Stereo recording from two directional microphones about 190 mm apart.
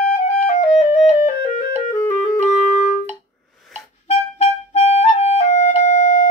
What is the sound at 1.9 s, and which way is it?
Clarinet, 10° left (ahead or behind).